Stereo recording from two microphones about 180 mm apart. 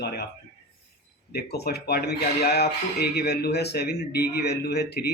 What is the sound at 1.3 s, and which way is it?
Speech, 60° left (ahead or behind).